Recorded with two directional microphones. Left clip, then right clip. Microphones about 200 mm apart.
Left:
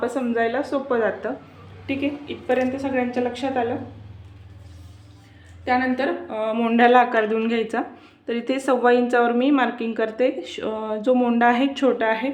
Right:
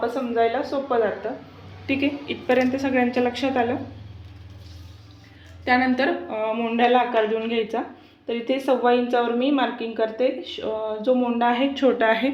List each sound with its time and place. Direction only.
0.0 s a woman's voice: 25° left (ahead or behind)
1.9 s a woman's voice: 5° right (ahead or behind)
5.6 s a woman's voice: 10° right (ahead or behind)
6.2 s a sound: 5° left (ahead or behind)
6.5 s a woman's voice: 25° left (ahead or behind)
11.9 s a woman's voice: 5° right (ahead or behind)